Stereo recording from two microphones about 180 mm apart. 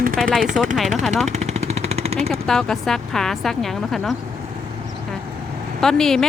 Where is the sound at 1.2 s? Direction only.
40° right (ahead or behind).